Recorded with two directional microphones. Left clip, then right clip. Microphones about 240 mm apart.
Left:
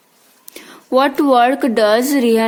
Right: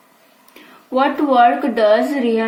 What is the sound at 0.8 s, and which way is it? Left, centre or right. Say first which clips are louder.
A woman's voice: left 3 dB; left.